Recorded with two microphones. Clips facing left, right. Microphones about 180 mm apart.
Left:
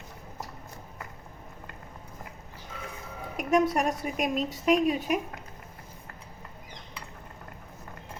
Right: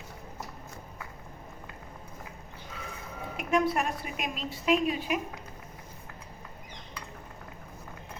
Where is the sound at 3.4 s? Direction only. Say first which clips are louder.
Left 3 dB; 45° left (ahead or behind).